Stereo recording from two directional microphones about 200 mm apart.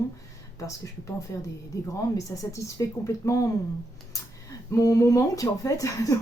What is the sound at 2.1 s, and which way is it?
A woman's voice, 15° left (ahead or behind).